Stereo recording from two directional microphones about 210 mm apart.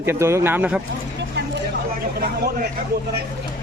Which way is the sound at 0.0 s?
10° right (ahead or behind).